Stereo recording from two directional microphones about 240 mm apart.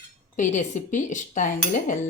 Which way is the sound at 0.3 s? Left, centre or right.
Left.